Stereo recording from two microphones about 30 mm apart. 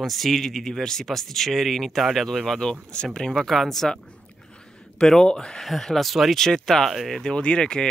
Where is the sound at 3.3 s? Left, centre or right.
Centre.